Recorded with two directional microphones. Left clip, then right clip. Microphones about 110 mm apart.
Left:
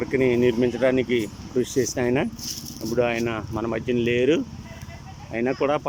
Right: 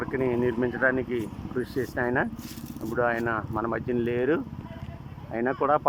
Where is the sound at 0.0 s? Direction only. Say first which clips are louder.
Left 6 dB; 25° left (ahead or behind).